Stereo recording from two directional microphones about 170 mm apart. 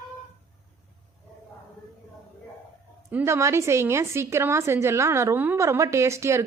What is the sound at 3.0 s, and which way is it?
A woman's voice, 10° right (ahead or behind).